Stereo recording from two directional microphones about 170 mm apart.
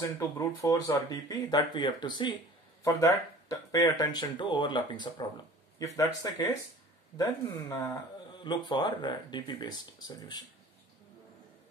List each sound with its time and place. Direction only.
0.0 s speech: 15° left (ahead or behind)